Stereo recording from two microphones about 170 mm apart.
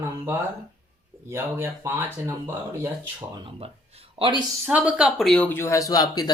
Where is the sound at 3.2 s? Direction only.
25° right (ahead or behind).